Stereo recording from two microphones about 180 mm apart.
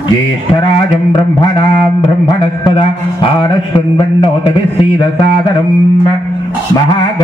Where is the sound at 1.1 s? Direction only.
25° left (ahead or behind).